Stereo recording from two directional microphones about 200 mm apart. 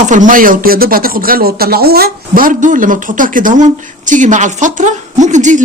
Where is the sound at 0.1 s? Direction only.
40° right (ahead or behind).